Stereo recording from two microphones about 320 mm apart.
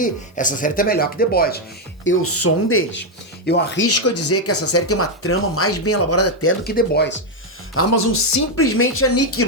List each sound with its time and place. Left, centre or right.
0.0 s speech: left
2.0 s speech: left
3.8 s speech: left
7.8 s a woman's voice: left
8.5 s speech: left